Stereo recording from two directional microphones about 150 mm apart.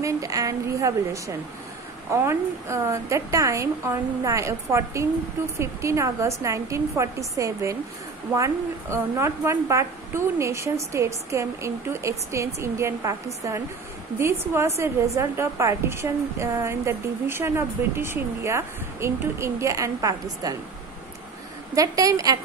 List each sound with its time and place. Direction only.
0.0 s a woman's voice: 20° right (ahead or behind)
8.9 s a woman's voice: 20° right (ahead or behind)
14.8 s a woman's voice: 20° right (ahead or behind)
21.7 s a woman's voice: 20° right (ahead or behind)